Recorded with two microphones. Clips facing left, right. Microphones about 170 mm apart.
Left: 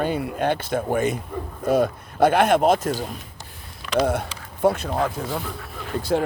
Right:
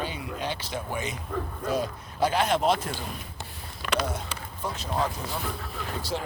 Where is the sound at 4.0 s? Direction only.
60° left (ahead or behind).